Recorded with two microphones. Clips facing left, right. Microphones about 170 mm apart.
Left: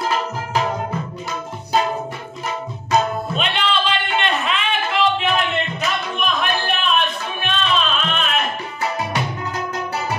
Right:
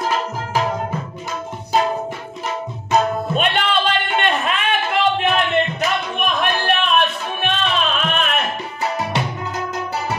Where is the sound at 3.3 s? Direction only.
50° right (ahead or behind).